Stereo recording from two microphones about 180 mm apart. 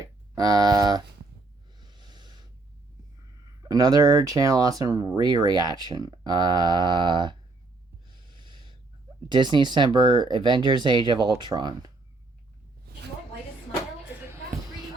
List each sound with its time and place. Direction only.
0.0 s speech: 20° right (ahead or behind)
1.8 s snort: 25° right (ahead or behind)
3.6 s speech: 20° right (ahead or behind)
8.1 s snort: 25° right (ahead or behind)
9.3 s speech: 25° right (ahead or behind)